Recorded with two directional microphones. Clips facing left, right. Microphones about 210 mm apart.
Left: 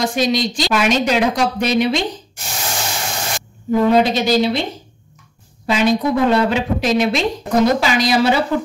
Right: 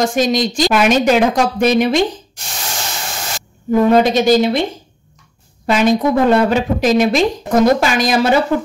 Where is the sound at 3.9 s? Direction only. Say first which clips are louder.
Right 4 dB; 50° right (ahead or behind).